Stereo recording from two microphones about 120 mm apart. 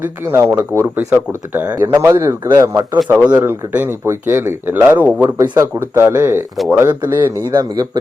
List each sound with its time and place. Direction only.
0.0 s speech: 20° right (ahead or behind)